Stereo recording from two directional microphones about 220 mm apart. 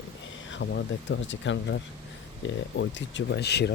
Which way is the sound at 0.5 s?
55° left (ahead or behind).